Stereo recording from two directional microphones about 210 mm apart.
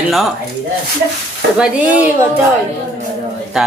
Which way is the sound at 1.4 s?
50° right (ahead or behind).